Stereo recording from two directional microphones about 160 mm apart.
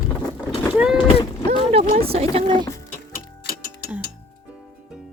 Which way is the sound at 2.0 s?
40° right (ahead or behind).